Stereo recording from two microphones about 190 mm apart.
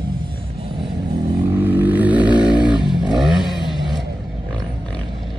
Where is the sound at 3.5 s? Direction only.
25° left (ahead or behind).